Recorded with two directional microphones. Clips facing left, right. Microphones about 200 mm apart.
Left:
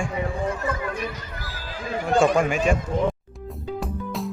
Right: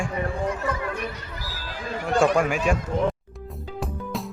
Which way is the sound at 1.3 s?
55° left (ahead or behind).